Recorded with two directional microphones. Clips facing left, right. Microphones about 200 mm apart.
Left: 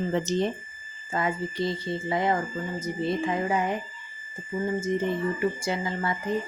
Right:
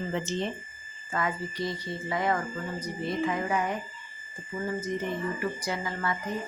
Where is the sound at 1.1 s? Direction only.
25° left (ahead or behind).